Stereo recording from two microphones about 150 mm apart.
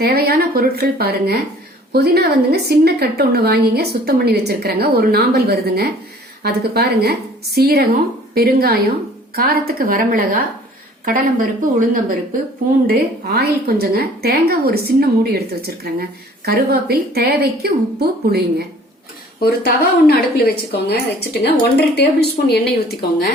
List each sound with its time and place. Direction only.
0.0 s a woman's voice: 90° right; by 12.1 s 65° right (ahead or behind)
12.9 s a woman's voice: 90° right
19.4 s a woman's voice: 90° left